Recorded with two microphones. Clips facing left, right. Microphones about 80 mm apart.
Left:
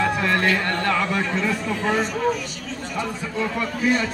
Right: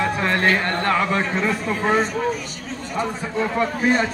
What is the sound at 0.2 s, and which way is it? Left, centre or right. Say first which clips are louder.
A man's voice: right 1 dB; right.